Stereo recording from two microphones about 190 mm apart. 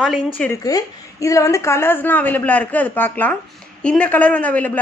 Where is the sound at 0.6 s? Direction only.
20° left (ahead or behind).